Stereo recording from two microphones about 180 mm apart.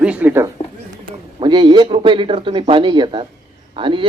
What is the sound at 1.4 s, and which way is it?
A man's voice, 25° right (ahead or behind).